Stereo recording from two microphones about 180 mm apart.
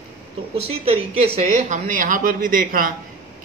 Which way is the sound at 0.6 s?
35° right (ahead or behind).